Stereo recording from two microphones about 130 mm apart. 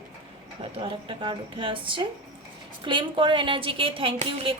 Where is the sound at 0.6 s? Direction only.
40° right (ahead or behind).